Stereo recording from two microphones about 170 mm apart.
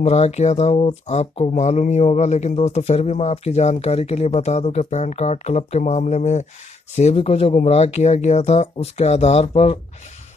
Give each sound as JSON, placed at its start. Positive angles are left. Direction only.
{"t": 0.0, "sound": "a man's voice", "side_deg": 40}